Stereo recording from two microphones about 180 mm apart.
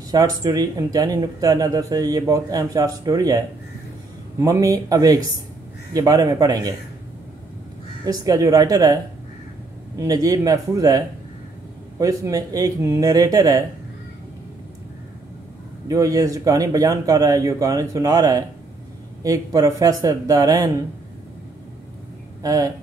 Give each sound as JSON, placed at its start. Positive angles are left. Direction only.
{"t": 0.1, "sound": "speech", "side_deg": -20}
{"t": 8.0, "sound": "speech", "side_deg": -20}
{"t": 15.9, "sound": "speech", "side_deg": -20}
{"t": 22.4, "sound": "speech", "side_deg": -20}